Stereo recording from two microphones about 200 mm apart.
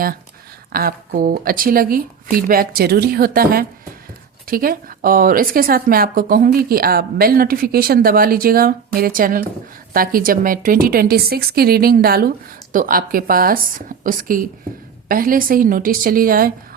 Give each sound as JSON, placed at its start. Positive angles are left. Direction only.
{"t": 0.7, "sound": "speech", "side_deg": -50}